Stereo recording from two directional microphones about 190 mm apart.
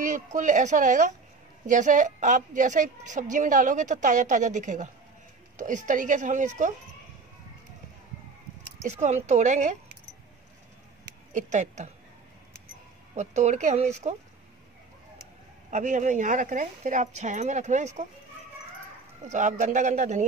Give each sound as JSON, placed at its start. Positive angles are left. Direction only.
{"t": 0.0, "sound": "a woman's voice", "side_deg": -40}
{"t": 8.8, "sound": "a woman's voice", "side_deg": -35}
{"t": 11.3, "sound": "a woman's voice", "side_deg": -40}
{"t": 13.1, "sound": "a woman's voice", "side_deg": -35}
{"t": 15.7, "sound": "a woman's voice", "side_deg": -40}
{"t": 19.2, "sound": "a woman's voice", "side_deg": -40}